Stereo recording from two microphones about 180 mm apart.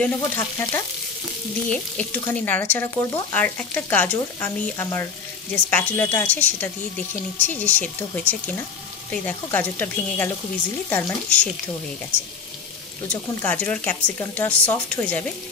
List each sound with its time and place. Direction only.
0.4 s speech: 15° left (ahead or behind)
13.1 s speech: 10° left (ahead or behind)